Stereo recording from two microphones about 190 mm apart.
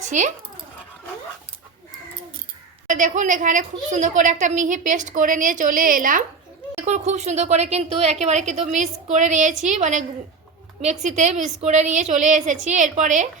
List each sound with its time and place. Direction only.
0.0 s speech: 40° right (ahead or behind)
2.8 s a woman's voice: 40° right (ahead or behind)